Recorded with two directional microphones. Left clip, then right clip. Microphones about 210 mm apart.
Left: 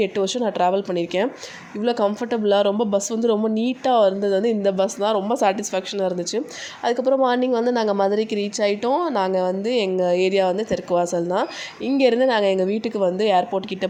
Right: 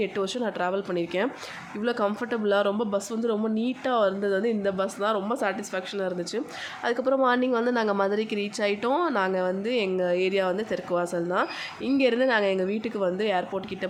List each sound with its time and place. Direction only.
0.0 s a woman's voice: 20° left (ahead or behind)